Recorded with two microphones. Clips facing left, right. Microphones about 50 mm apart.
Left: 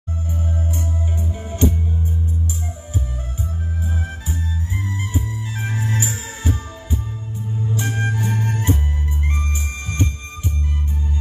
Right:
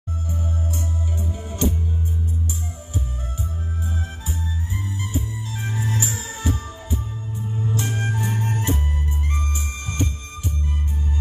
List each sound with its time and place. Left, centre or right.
1.5 s music: left
5.1 s music: left
7.7 s music: left